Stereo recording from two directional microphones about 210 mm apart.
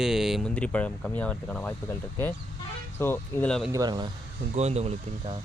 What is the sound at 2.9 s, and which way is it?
Speech, 10° left (ahead or behind).